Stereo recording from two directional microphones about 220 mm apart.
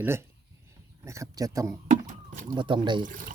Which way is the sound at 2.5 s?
20° right (ahead or behind).